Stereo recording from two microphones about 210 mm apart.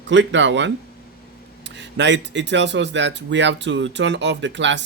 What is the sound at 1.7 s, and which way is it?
Speech, 55° right (ahead or behind).